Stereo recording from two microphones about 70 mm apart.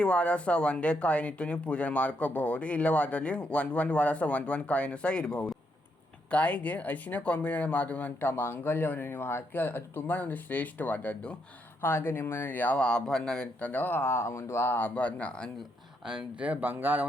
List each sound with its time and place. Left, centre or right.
0.0 s speech: centre
11.8 s speech: left; by 13.7 s centre
13.7 s speech: left
16.0 s speech: centre
16.5 s speech: right